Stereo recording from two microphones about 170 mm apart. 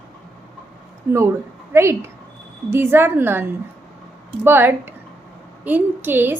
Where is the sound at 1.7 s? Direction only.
15° right (ahead or behind).